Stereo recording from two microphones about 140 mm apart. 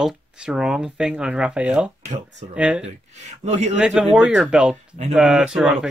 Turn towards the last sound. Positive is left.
turn(degrees=-5)  # may be behind; listen again after turning